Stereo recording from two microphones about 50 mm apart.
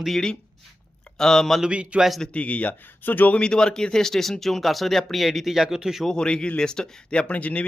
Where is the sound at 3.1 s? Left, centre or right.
Left.